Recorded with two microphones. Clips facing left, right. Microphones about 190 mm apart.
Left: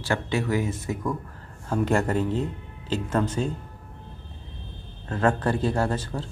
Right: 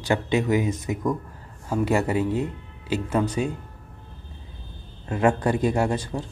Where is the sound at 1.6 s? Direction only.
5° right (ahead or behind).